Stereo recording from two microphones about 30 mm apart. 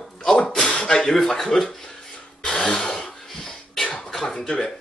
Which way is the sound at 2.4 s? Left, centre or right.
Centre.